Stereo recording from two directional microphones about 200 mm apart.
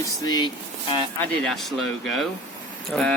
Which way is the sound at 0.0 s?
20° left (ahead or behind).